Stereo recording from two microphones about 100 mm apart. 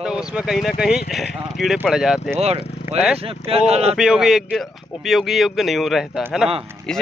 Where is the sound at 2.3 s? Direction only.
90° right.